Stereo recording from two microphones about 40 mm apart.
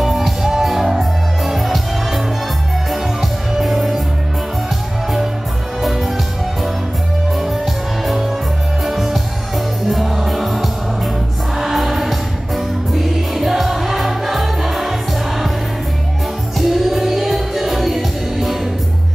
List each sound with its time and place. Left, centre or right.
0.0 s music: centre
5.8 s music: centre
7.3 s music: centre
16.5 s music: centre